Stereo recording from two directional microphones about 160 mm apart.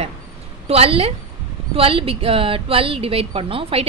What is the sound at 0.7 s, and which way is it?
A woman's voice, 40° right (ahead or behind).